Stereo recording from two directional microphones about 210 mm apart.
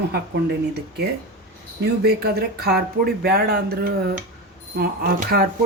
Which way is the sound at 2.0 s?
50° right (ahead or behind).